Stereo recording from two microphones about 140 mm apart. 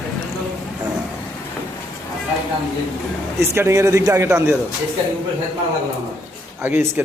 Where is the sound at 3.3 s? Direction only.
20° right (ahead or behind).